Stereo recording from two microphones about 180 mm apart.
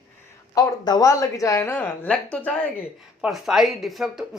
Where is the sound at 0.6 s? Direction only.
20° left (ahead or behind).